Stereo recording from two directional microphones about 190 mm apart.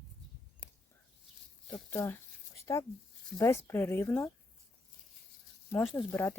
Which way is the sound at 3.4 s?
15° left (ahead or behind).